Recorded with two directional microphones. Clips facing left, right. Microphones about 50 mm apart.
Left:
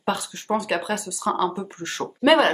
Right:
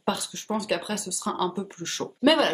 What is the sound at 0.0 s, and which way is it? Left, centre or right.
Speech, centre.